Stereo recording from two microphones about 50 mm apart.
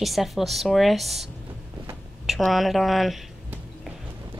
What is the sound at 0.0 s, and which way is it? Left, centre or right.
Speech, centre.